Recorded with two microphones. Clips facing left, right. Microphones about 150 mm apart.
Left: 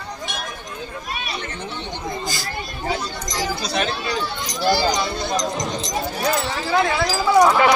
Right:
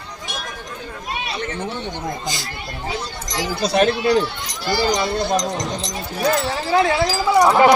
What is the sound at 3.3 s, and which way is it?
Speech, 60° right (ahead or behind).